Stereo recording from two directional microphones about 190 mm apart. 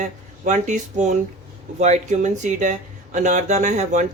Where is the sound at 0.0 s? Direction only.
40° right (ahead or behind).